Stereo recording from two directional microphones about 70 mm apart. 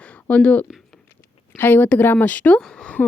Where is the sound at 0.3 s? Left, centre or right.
Centre.